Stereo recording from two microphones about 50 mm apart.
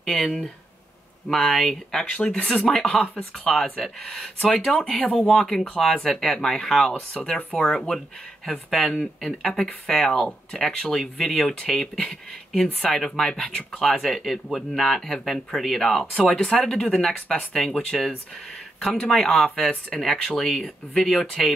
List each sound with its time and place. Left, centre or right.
0.0 s speech: centre
2.1 s speech: left
2.7 s speech: centre
4.9 s speech: centre
7.5 s speech: centre
8.5 s speech: centre
19.5 s speech: centre
19.9 s speech: centre